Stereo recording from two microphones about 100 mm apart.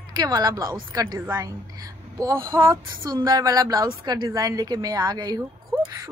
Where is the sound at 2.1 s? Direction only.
30° right (ahead or behind).